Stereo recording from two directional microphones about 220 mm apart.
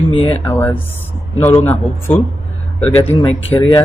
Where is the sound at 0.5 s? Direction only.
10° left (ahead or behind).